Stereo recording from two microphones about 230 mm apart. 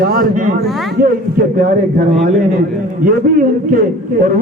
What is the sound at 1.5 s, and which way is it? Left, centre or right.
Speech, right.